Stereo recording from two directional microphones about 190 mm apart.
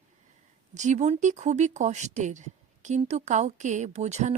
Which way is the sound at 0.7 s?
40° right (ahead or behind).